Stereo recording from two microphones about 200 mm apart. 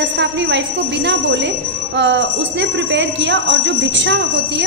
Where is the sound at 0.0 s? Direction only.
60° right (ahead or behind).